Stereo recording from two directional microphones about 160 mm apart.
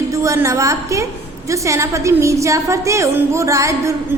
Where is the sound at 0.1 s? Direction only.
20° right (ahead or behind).